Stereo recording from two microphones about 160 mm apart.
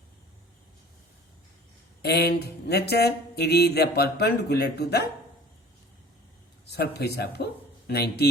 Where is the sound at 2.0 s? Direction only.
90° left.